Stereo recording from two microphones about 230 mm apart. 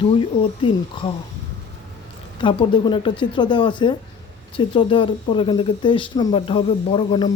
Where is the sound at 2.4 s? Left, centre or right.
Centre.